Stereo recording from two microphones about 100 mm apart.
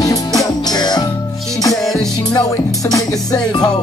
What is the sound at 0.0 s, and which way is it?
Music, 35° left (ahead or behind).